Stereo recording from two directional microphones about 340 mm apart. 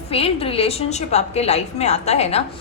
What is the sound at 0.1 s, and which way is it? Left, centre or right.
A woman's voice, centre.